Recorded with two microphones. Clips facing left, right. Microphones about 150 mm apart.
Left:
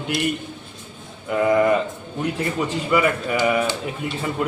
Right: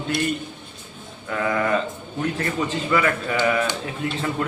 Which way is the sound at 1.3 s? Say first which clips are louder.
Left 5 dB; 15° left (ahead or behind).